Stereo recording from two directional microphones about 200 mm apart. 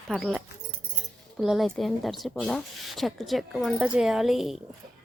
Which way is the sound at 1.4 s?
Centre (ahead or behind).